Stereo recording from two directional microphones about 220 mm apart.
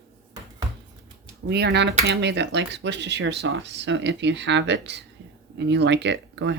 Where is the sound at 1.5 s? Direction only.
50° right (ahead or behind).